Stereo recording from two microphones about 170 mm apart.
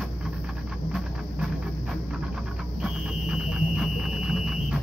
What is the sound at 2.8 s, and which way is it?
Music, 5° right (ahead or behind).